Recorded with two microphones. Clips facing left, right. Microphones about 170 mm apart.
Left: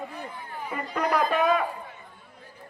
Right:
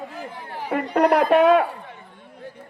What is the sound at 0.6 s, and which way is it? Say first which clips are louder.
A man's voice: right 10 dB; 70° right (ahead or behind).